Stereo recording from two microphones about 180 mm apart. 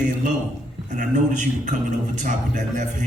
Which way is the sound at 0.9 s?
45° right (ahead or behind).